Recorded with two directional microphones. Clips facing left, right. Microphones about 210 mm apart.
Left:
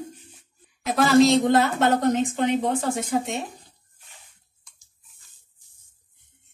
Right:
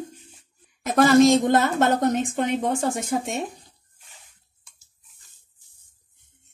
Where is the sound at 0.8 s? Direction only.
50° right (ahead or behind).